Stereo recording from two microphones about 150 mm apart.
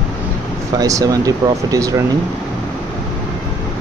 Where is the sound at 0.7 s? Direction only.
25° right (ahead or behind).